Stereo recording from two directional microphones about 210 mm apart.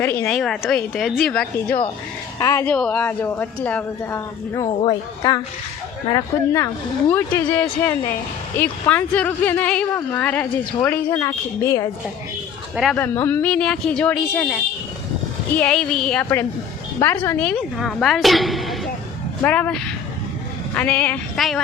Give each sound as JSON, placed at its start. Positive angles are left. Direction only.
{"t": 0.0, "sound": "a woman's voice", "side_deg": 10}
{"t": 4.6, "sound": "a woman's voice", "side_deg": 25}
{"t": 12.7, "sound": "a woman's voice", "side_deg": 0}